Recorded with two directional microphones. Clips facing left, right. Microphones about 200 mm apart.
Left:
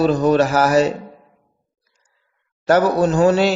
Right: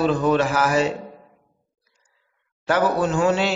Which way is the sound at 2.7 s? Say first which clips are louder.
Left 5 dB; 40° left (ahead or behind).